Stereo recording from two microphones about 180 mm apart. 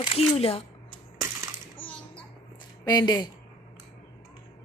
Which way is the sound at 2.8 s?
20° left (ahead or behind).